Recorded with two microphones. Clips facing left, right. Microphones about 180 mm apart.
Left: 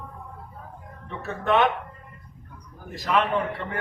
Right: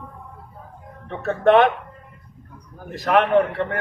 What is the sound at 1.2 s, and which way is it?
Speech, 60° right (ahead or behind).